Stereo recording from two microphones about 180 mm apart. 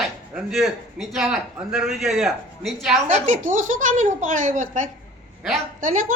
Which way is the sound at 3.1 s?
45° right (ahead or behind).